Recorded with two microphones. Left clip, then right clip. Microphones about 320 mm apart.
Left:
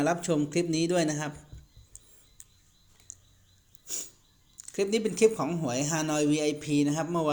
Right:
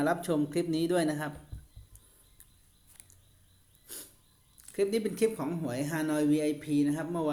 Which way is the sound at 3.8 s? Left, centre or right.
Centre.